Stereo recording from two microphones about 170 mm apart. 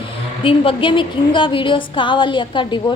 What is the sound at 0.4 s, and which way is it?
A woman's voice, 30° left (ahead or behind).